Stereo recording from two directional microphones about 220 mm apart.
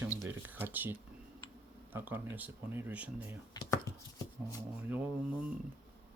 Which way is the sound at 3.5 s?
20° left (ahead or behind).